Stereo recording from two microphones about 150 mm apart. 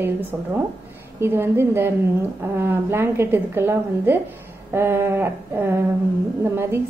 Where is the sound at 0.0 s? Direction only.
15° right (ahead or behind).